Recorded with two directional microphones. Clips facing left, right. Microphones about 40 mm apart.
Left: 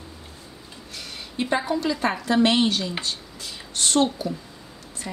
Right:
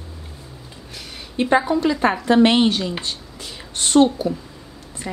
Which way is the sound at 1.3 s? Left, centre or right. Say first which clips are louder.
Right 7 dB; right.